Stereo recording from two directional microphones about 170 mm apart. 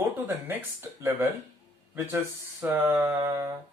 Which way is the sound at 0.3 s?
15° right (ahead or behind).